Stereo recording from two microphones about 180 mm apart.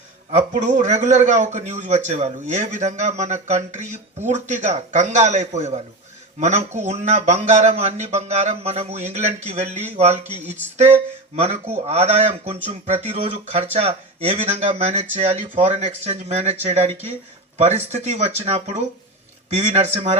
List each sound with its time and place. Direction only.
0.3 s a man's voice: 40° right (ahead or behind)